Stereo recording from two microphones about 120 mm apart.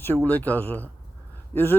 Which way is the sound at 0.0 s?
15° left (ahead or behind).